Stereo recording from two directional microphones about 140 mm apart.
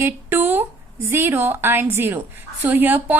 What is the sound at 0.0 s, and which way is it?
A woman's voice, 15° right (ahead or behind).